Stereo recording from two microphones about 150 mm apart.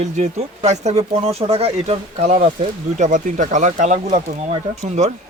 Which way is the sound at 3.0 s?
60° right (ahead or behind).